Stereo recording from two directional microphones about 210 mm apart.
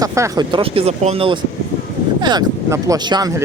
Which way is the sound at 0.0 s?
15° right (ahead or behind).